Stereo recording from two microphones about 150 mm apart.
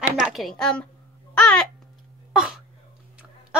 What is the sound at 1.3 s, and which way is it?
Babbling, 5° left (ahead or behind).